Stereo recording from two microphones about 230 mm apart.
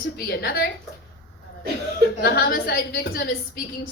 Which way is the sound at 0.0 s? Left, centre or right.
Left.